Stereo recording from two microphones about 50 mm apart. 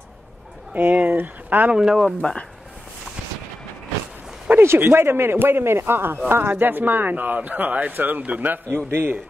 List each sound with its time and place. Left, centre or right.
0.7 s speech: right
1.7 s speech: centre
2.2 s speech: left
4.5 s a sound: right
4.9 s a man's voice: right
6.5 s speech: right
8.6 s a man's voice: right